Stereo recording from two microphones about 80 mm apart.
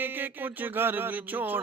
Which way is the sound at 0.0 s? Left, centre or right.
Right.